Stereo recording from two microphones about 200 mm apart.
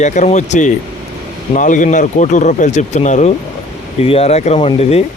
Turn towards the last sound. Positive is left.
turn(degrees=30)  # may be behind; listen again after turning